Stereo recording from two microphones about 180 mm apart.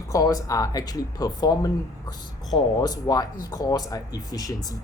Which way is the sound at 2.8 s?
20° left (ahead or behind).